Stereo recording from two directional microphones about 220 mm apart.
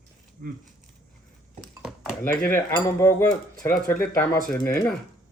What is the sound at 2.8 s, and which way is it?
Speech, 10° left (ahead or behind).